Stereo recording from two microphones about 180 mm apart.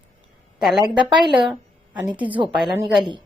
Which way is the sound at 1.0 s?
25° right (ahead or behind).